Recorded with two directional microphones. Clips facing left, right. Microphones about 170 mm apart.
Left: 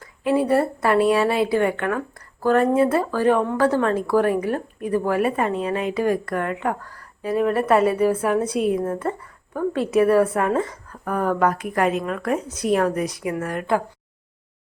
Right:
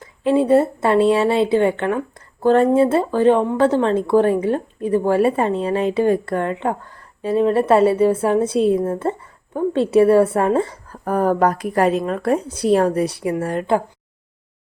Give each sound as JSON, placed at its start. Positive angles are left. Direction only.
{"t": 0.0, "sound": "a woman's voice", "side_deg": -25}